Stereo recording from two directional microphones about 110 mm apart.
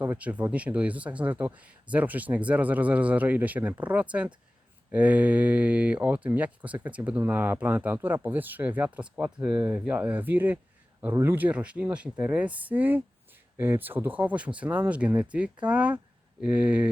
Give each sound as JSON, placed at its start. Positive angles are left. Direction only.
{"t": 0.0, "sound": "speech", "side_deg": -15}